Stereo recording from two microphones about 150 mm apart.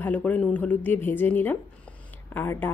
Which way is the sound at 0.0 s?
10° left (ahead or behind).